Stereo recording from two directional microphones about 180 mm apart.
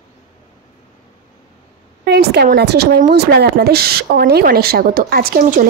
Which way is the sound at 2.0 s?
65° right (ahead or behind).